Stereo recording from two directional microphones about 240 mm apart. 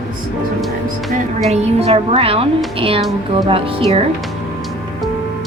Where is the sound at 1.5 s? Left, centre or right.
Right.